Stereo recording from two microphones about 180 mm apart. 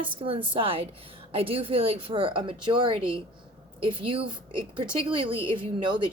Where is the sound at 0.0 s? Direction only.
30° right (ahead or behind).